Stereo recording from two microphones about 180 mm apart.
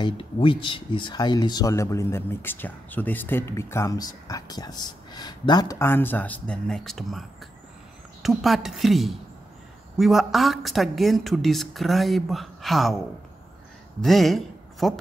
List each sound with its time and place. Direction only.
0.0 s a woman's voice: 30° left (ahead or behind); by 12.9 s centre (ahead or behind)
14.0 s speech: centre (ahead or behind)